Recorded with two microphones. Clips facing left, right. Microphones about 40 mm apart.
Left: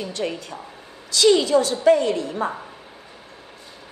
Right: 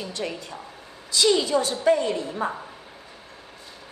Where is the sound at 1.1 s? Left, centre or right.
Left.